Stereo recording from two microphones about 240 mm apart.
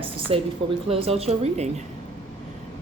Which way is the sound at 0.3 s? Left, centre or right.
Right.